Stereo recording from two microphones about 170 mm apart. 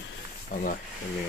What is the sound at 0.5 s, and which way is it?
Speech, 45° left (ahead or behind).